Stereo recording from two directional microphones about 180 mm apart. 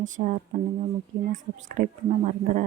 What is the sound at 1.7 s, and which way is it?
Speech, 45° right (ahead or behind).